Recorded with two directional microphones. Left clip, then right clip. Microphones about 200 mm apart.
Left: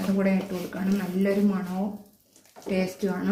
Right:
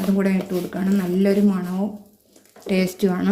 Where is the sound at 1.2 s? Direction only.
55° right (ahead or behind).